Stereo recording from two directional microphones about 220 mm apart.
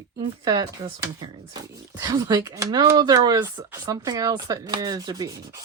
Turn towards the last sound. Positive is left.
turn(degrees=-15)  # may be behind; listen again after turning